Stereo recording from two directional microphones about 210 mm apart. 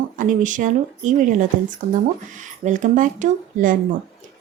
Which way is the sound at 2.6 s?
35° right (ahead or behind).